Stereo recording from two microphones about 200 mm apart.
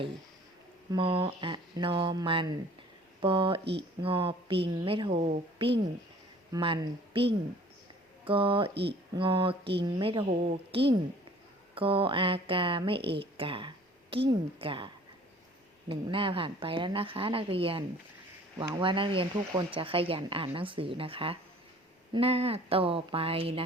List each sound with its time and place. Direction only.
0.9 s speech: 25° right (ahead or behind)
3.6 s speech: 55° right (ahead or behind)
4.0 s speech: 25° right (ahead or behind)
8.7 s speech: 55° right (ahead or behind)
9.1 s speech: 25° right (ahead or behind)
13.1 s a sound: 25° right (ahead or behind)
14.3 s speech: 25° right (ahead or behind)
15.9 s speech: 25° right (ahead or behind)